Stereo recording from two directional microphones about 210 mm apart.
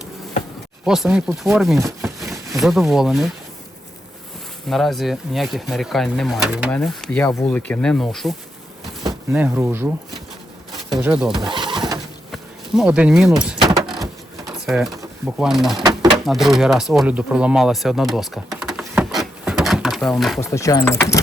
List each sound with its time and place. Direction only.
0.9 s speech: centre (ahead or behind)
4.7 s speech: centre (ahead or behind)
9.0 s speech: 10° right (ahead or behind)
10.9 s speech: 10° right (ahead or behind)
11.3 s pigeon: 20° right (ahead or behind)
12.3 s insect: 5° right (ahead or behind)
14.4 s a sound: centre (ahead or behind)
15.4 s speech: centre (ahead or behind)
15.8 s bird: 20° right (ahead or behind)
16.1 s speech: centre (ahead or behind)
20.4 s speech: 15° left (ahead or behind)